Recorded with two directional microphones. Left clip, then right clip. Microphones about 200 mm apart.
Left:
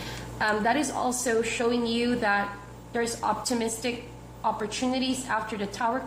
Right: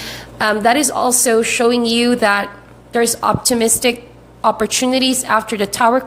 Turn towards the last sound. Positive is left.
turn(degrees=-45)  # may be behind; listen again after turning